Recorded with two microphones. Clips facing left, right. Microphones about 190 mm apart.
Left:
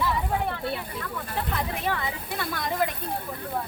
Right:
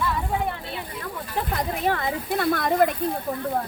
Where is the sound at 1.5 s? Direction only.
45° right (ahead or behind).